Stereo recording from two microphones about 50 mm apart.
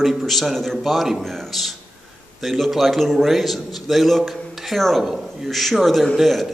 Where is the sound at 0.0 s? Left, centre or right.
Centre.